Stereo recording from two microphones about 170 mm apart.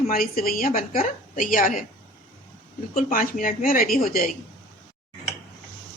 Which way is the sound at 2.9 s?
50° left (ahead or behind).